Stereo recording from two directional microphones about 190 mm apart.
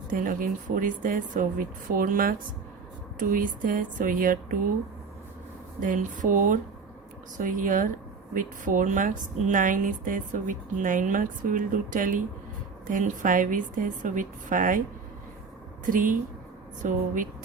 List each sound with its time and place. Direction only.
0.1 s speech: 45° right (ahead or behind)
5.8 s speech: 45° right (ahead or behind)
15.9 s speech: 45° right (ahead or behind)